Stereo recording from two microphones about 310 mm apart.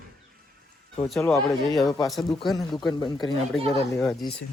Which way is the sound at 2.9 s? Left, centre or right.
Centre.